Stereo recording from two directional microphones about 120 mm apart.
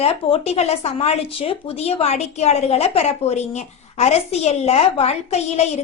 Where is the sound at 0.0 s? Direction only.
60° left (ahead or behind).